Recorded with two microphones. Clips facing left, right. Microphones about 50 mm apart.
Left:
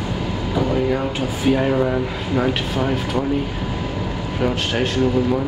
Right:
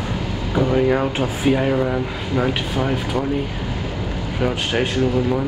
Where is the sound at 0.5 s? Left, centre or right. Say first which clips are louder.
Right 3 dB; right.